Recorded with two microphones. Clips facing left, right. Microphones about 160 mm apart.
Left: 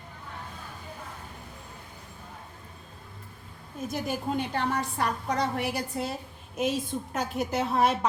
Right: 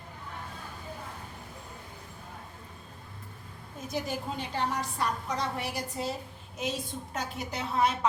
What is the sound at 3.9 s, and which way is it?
A woman's voice, 55° left (ahead or behind).